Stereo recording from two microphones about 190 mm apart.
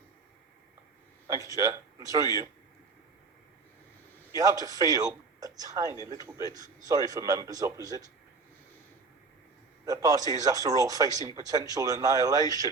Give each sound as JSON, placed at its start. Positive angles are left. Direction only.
{"t": 1.4, "sound": "speech", "side_deg": -15}
{"t": 4.4, "sound": "speech", "side_deg": -20}
{"t": 9.8, "sound": "speech", "side_deg": -20}